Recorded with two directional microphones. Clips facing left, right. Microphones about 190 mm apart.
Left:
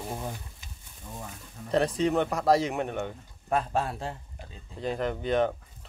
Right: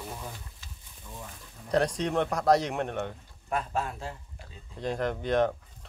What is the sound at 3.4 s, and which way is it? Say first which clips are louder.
Speech: left 3 dB; 35° left (ahead or behind).